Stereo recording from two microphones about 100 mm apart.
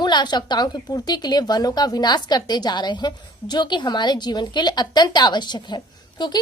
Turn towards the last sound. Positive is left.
turn(degrees=45)  # may be behind; listen again after turning